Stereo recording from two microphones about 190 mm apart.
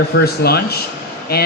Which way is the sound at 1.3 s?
55° left (ahead or behind).